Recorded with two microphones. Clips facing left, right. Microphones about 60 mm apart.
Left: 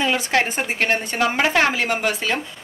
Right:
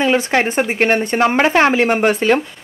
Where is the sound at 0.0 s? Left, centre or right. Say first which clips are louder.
Right 5 dB; right.